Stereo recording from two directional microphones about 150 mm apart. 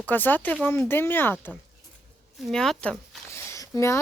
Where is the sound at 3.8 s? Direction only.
20° left (ahead or behind).